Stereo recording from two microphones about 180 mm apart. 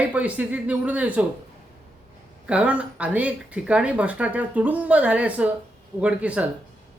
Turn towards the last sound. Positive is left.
turn(degrees=-5)  # may be behind; listen again after turning